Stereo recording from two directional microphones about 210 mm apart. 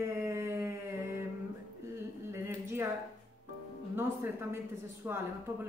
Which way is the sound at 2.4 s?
10° right (ahead or behind).